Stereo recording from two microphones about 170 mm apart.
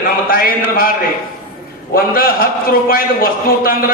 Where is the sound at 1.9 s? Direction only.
60° left (ahead or behind).